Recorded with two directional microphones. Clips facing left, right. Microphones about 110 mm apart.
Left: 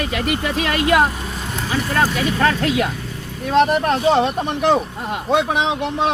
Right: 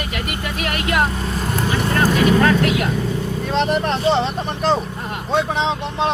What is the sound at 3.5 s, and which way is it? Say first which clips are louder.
Speech: left 4 dB; 5° left (ahead or behind).